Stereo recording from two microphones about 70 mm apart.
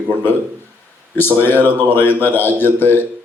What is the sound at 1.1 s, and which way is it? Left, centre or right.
A man's voice, left.